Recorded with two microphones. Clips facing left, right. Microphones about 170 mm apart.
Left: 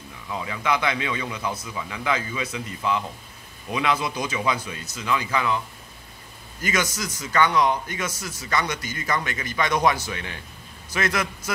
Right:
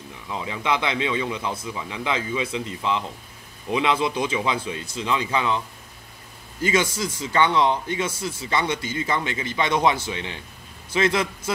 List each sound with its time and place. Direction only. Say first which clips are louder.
0.3 s a man's voice: even; 25° right (ahead or behind)
6.6 s a man's voice: right 4 dB; 25° right (ahead or behind)